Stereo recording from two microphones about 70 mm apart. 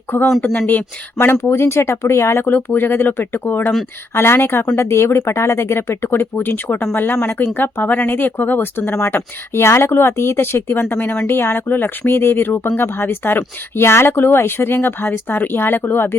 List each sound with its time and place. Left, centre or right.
0.1 s speech: left
2.5 s speech: left
11.3 s speech: left